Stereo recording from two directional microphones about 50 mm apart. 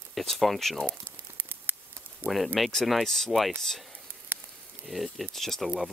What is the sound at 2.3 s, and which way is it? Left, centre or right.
Speech, centre.